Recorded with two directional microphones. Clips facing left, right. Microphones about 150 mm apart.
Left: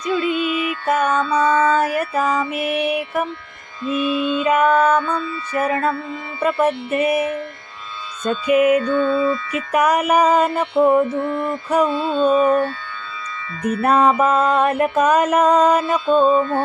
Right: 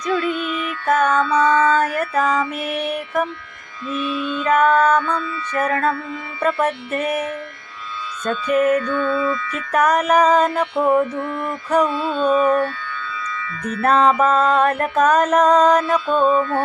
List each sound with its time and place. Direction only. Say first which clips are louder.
0.0 s music: left 1 dB; 10° left (ahead or behind)
1.1 s carnatic music: right 1 dB; 30° left (ahead or behind)
1.4 s mantra: left 1 dB; 10° left (ahead or behind)
3.8 s carnatic music: left 4 dB; 25° left (ahead or behind)
4.4 s mantra: right 1 dB; 10° left (ahead or behind)
4.9 s carnatic music: even; 30° left (ahead or behind)
5.5 s mantra: even; 5° left (ahead or behind)
8.4 s mantra: left 2 dB; 10° left (ahead or behind)
8.8 s carnatic music: left 3 dB; 30° left (ahead or behind)
9.7 s mantra: even; 10° left (ahead or behind)
11.1 s carnatic music: left 3 dB; 30° left (ahead or behind)
13.8 s mantra: even; 10° left (ahead or behind)
16.0 s carnatic music: left 2 dB; 25° left (ahead or behind)